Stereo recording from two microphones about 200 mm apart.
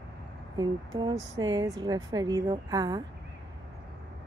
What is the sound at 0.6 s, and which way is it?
Speech, 20° right (ahead or behind).